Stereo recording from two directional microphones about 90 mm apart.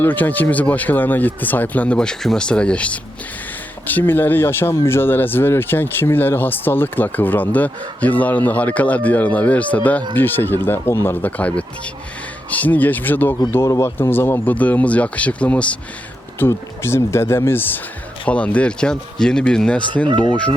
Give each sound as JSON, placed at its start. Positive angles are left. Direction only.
{"t": 0.0, "sound": "speech", "side_deg": 20}
{"t": 13.5, "sound": "speech", "side_deg": 35}
{"t": 14.1, "sound": "speech", "side_deg": 25}
{"t": 16.4, "sound": "speech", "side_deg": 30}